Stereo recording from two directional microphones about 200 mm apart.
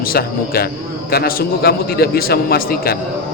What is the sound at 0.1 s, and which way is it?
A man's voice, 50° left (ahead or behind).